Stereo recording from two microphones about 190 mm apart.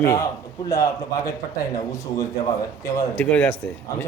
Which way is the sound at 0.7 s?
15° left (ahead or behind).